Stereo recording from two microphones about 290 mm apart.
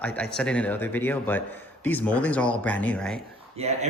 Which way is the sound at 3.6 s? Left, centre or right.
Right.